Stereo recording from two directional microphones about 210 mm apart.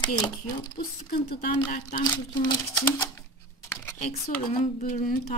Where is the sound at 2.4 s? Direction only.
15° left (ahead or behind).